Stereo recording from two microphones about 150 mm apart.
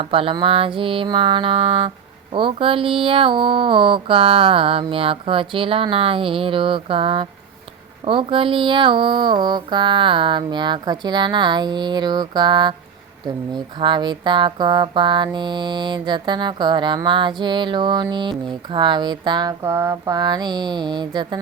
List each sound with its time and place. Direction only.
0.0 s speech: 35° right (ahead or behind)